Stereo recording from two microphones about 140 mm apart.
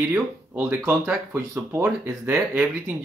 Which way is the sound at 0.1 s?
15° right (ahead or behind).